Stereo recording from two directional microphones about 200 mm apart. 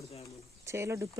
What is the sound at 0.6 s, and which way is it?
Speech, 15° right (ahead or behind).